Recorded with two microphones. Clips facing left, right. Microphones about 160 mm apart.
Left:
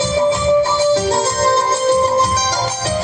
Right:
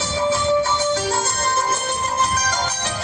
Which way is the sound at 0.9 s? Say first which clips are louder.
Left 7 dB; 30° left (ahead or behind).